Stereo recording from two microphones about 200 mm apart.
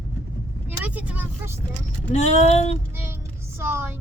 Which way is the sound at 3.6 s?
10° right (ahead or behind).